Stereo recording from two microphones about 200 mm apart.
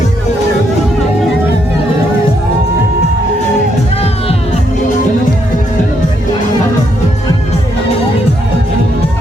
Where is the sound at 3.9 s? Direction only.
30° left (ahead or behind).